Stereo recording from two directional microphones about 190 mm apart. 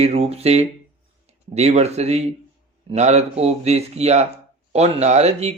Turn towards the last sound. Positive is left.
turn(degrees=-35)  # may be behind; listen again after turning